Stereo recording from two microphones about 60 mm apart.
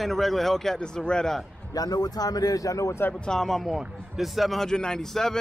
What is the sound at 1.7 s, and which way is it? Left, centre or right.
A man's voice, left.